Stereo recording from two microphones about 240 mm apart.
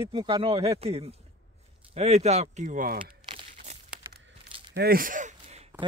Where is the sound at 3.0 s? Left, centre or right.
Right.